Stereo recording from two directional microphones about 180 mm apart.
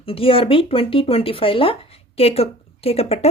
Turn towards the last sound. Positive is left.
turn(degrees=35)  # may be behind; listen again after turning